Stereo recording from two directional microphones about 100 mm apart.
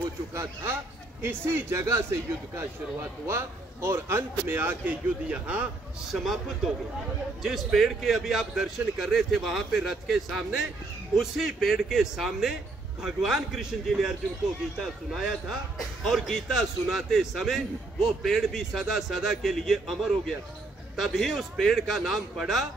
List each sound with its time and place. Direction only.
0.3 s a man's voice: 30° right (ahead or behind)
3.3 s a man's voice: 25° right (ahead or behind)
6.1 s a man's voice: 5° right (ahead or behind)